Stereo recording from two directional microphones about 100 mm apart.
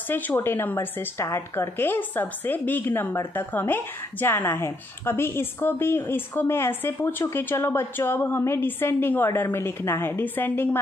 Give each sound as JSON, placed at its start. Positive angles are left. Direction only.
{"t": 0.1, "sound": "a woman's voice", "side_deg": 25}